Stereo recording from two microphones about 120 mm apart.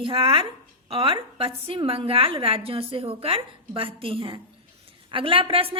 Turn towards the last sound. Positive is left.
turn(degrees=-50)  # may be behind; listen again after turning